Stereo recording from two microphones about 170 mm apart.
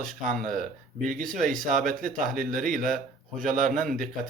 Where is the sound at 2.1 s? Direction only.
50° right (ahead or behind).